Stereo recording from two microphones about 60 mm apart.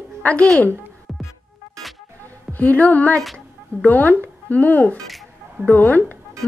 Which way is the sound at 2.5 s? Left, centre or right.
Left.